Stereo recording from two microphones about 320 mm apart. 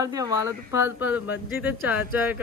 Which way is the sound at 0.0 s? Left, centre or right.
Centre.